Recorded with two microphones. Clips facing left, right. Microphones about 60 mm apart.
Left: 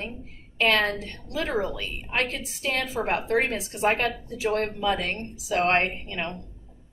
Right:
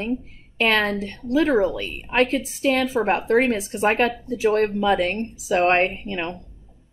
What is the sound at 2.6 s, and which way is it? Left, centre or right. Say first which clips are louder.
A woman's voice: right 6 dB; right.